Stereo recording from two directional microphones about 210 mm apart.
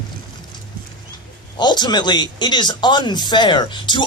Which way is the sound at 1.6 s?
20° left (ahead or behind).